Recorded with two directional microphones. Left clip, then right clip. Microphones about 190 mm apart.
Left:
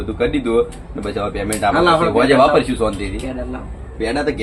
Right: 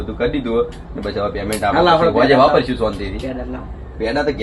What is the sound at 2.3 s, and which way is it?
Speech, 5° left (ahead or behind).